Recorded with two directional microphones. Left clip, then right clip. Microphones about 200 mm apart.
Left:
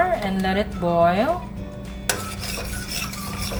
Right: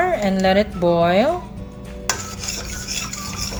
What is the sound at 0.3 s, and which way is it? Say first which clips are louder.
Speech: right 7 dB; 45° right (ahead or behind).